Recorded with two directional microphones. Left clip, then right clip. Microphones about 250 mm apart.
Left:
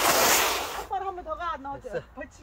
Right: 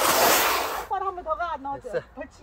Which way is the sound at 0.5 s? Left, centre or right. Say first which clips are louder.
Right 4 dB; centre.